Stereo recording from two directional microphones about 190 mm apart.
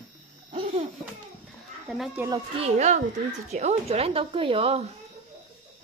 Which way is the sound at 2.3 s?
30° right (ahead or behind).